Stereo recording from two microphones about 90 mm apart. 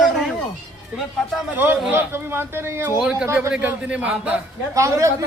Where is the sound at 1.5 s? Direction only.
25° right (ahead or behind).